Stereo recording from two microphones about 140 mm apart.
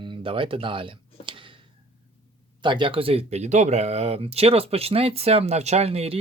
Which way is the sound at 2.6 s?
35° right (ahead or behind).